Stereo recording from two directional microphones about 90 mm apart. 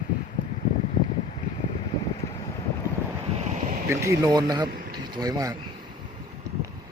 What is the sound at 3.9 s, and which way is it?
Speech, 35° right (ahead or behind).